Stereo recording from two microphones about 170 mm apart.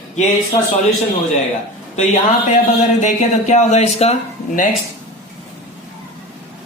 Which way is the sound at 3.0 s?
45° left (ahead or behind).